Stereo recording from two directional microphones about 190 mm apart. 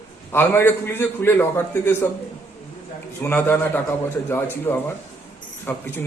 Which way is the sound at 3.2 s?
10° left (ahead or behind).